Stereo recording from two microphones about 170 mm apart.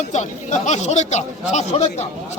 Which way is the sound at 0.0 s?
45° left (ahead or behind).